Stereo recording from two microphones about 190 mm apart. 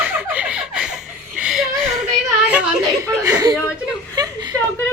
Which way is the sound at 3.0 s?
15° right (ahead or behind).